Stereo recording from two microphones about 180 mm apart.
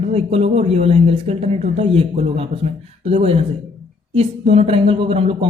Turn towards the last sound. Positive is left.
turn(degrees=-35)  # may be behind; listen again after turning